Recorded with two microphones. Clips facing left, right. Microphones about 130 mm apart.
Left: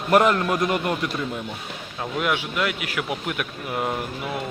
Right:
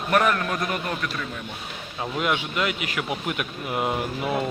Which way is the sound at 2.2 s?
Centre (ahead or behind).